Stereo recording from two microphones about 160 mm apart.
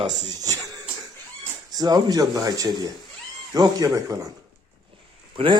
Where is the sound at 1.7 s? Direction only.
25° right (ahead or behind).